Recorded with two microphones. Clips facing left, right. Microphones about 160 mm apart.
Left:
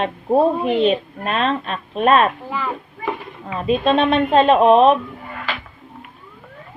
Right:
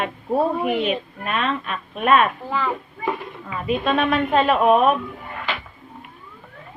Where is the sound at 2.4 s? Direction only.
5° left (ahead or behind).